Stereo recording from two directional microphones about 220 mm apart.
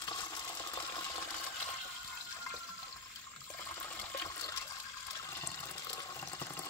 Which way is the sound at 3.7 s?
10° left (ahead or behind).